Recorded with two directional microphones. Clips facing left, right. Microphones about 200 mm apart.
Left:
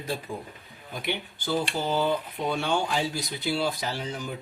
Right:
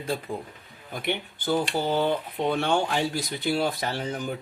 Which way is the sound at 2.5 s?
60° right (ahead or behind).